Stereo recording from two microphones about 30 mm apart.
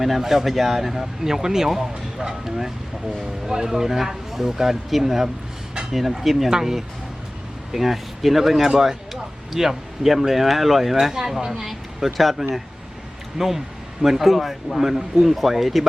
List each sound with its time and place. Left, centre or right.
0.0 s speech: centre
6.5 s speech: centre
7.8 s speech: centre
11.1 s speech: centre